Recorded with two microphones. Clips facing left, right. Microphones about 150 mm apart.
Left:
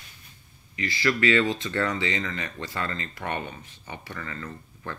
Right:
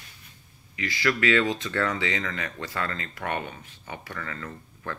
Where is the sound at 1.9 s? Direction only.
5° right (ahead or behind).